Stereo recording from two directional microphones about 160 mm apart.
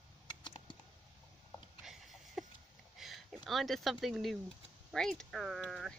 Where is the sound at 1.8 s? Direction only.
Centre (ahead or behind).